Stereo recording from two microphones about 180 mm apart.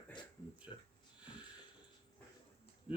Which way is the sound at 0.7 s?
30° left (ahead or behind).